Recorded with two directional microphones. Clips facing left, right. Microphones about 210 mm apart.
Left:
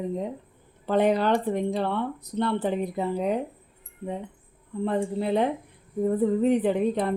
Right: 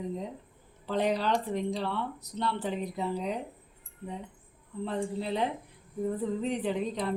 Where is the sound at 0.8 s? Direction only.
55° left (ahead or behind).